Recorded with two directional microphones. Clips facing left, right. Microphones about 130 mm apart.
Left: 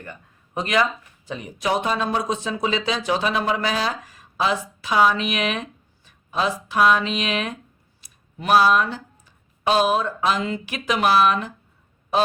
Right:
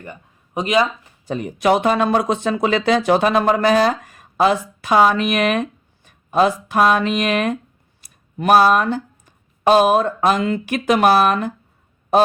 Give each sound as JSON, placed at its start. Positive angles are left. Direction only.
{"t": 0.0, "sound": "speech", "side_deg": -15}
{"t": 1.3, "sound": "speech", "side_deg": -55}